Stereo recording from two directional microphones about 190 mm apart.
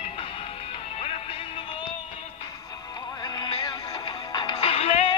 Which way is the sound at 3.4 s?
25° left (ahead or behind).